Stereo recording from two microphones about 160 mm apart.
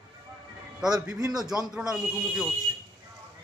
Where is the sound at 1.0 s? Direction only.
5° right (ahead or behind).